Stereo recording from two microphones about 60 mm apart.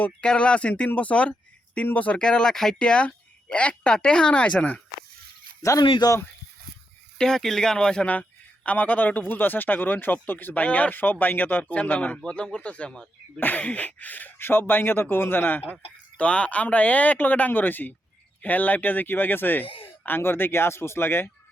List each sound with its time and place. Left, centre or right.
0.0 s speech: centre
2.1 s speech: centre
5.6 s speech: left
7.2 s speech: centre
8.0 s speech: left
13.4 s speech: left
15.7 s speech: left